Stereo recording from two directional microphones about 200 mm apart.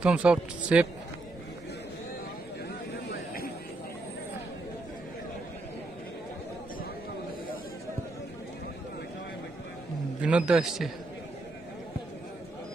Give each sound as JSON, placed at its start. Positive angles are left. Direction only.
{"t": 0.0, "sound": "a man's voice", "side_deg": -5}
{"t": 2.9, "sound": "a sound", "side_deg": 50}
{"t": 10.2, "sound": "a man's voice", "side_deg": -5}